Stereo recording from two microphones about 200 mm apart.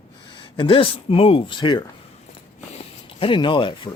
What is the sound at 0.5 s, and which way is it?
A man's voice, 25° left (ahead or behind).